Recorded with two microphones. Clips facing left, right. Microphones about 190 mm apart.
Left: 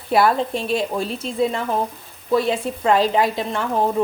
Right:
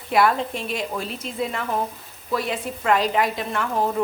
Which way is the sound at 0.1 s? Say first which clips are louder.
Left 3 dB; 35° left (ahead or behind).